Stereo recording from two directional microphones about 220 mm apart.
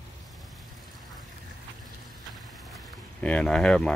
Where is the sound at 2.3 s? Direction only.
Centre (ahead or behind).